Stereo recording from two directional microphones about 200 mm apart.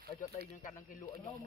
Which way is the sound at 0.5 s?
45° left (ahead or behind).